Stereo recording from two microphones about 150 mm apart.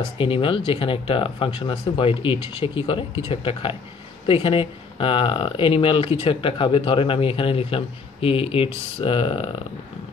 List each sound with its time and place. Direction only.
0.2 s speech: 35° left (ahead or behind)